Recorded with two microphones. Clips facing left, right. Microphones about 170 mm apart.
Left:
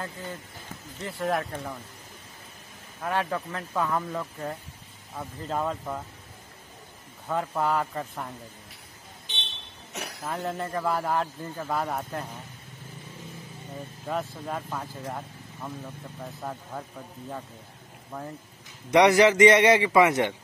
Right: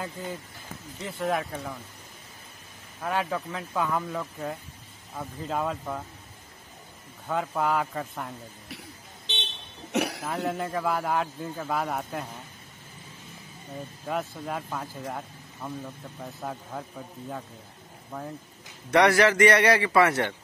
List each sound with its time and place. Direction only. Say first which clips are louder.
1.0 s a man's voice: even; centre (ahead or behind)
3.0 s a man's voice: even; centre (ahead or behind)
7.2 s a man's voice: even; centre (ahead or behind)
9.9 s cough: right 11 dB; 70° right (ahead or behind)
10.2 s a man's voice: right 2 dB; 5° right (ahead or behind)
14.0 s a man's voice: even; centre (ahead or behind)
18.1 s a man's voice: even; centre (ahead or behind)
18.9 s a man's voice: left 2 dB; 20° left (ahead or behind)